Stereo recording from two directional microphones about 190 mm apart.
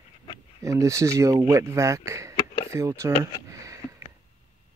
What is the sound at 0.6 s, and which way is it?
Speech, 15° right (ahead or behind).